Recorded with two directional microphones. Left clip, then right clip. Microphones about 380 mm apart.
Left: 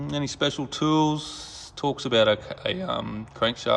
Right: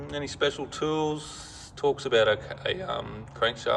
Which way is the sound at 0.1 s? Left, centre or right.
Centre.